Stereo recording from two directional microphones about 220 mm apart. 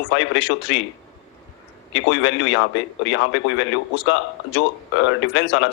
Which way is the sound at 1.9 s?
60° left (ahead or behind).